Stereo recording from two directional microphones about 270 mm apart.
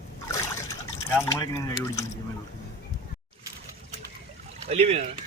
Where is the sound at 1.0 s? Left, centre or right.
Centre.